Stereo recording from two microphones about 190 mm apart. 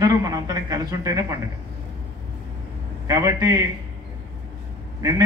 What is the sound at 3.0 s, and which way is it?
Speech, 15° right (ahead or behind).